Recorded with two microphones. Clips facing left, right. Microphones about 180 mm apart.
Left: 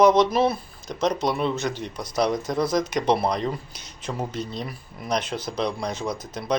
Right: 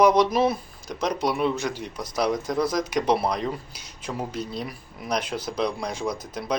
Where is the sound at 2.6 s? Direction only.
25° left (ahead or behind).